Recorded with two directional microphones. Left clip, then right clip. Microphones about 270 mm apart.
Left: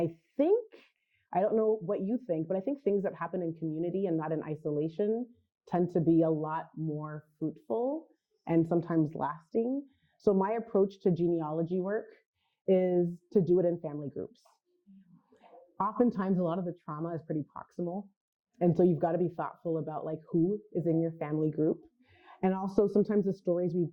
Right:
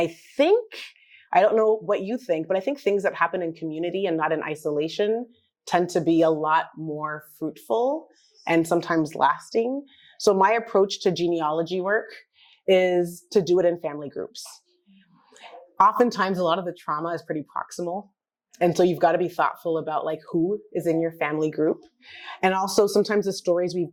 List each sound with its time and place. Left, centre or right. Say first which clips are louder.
0.0 s speech: right 8 dB; centre
0.7 s a sound: right 18 dB; centre
1.9 s speech: right 8 dB; centre
6.7 s speech: right 9 dB; right
7.7 s speech: right 10 dB; right
8.4 s speech: right 8 dB; centre
20.3 s speech: right 5 dB; right
20.7 s speech: right 8 dB; centre